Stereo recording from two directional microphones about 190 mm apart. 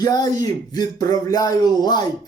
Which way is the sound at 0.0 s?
20° left (ahead or behind).